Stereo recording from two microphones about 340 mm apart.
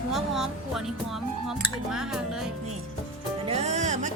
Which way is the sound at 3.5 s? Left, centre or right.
Centre.